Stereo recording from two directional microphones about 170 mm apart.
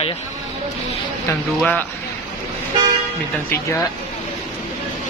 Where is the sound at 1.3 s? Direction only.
10° left (ahead or behind).